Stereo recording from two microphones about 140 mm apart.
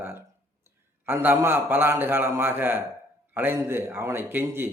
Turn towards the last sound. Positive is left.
turn(degrees=-15)  # may be behind; listen again after turning